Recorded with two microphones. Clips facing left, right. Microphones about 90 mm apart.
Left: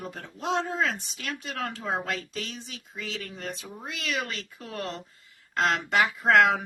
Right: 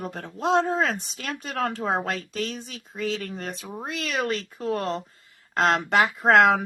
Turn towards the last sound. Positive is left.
turn(degrees=-45)  # may be behind; listen again after turning